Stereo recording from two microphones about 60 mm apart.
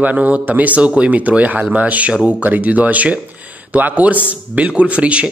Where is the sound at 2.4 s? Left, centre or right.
Right.